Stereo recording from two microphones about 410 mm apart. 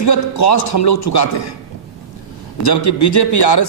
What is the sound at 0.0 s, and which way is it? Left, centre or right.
Speech, left.